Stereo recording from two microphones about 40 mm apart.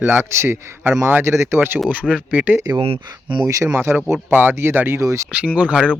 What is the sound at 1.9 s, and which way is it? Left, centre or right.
Speech, right.